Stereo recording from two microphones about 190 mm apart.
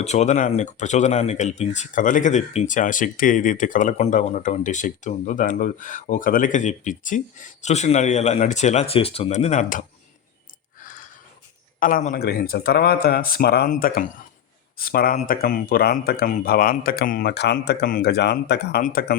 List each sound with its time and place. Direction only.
0.0 s speech: 35° left (ahead or behind)
11.8 s speech: 45° left (ahead or behind)